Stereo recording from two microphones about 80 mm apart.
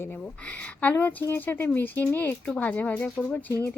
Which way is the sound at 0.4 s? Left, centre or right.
Centre.